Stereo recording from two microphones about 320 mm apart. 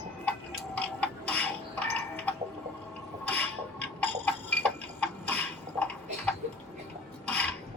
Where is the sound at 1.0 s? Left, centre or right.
Centre.